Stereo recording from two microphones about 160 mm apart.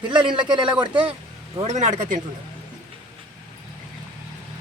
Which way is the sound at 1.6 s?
50° right (ahead or behind).